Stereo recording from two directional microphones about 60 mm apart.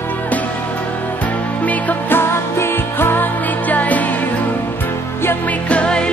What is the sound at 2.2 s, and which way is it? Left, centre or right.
Music, left.